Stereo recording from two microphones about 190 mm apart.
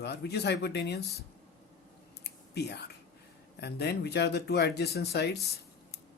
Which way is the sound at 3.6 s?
60° left (ahead or behind).